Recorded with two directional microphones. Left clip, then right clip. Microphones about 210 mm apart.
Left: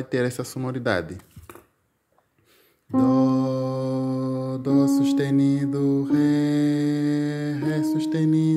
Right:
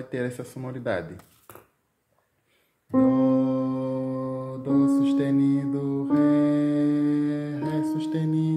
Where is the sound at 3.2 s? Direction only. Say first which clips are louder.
Left 1 dB; 40° left (ahead or behind).